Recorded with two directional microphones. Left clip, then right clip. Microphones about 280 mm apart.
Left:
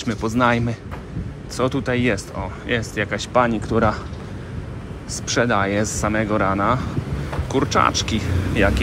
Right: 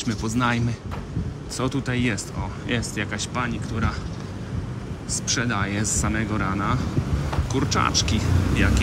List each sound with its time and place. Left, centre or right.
0.0 s speech: centre
5.2 s speech: centre